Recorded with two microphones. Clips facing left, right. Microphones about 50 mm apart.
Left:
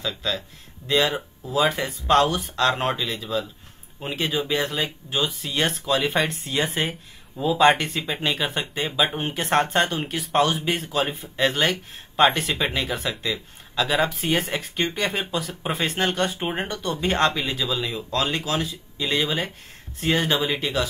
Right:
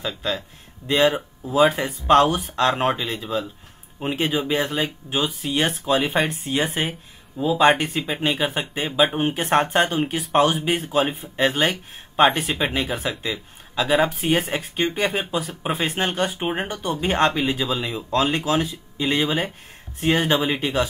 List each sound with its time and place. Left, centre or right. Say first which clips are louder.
0.0 s speech: right 1 dB; right